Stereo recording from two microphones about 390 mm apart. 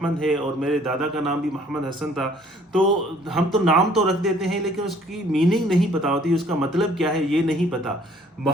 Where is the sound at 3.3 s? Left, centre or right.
Centre.